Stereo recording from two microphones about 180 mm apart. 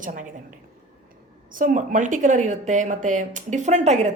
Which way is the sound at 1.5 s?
50° right (ahead or behind).